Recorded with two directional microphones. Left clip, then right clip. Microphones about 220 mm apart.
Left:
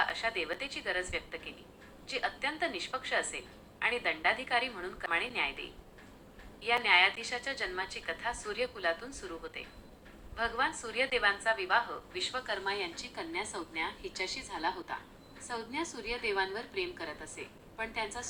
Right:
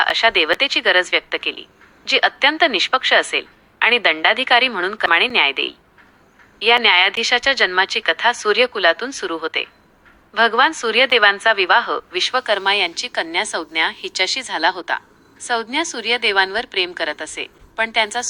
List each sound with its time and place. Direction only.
0.0 s a woman's voice: 55° right (ahead or behind)
2.1 s a woman's voice: 60° right (ahead or behind)
12.5 s a woman's voice: 40° right (ahead or behind)